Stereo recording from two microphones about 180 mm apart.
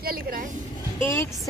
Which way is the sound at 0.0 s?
55° right (ahead or behind).